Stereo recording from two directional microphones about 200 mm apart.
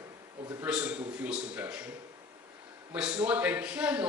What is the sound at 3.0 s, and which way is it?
A man's voice, 5° right (ahead or behind).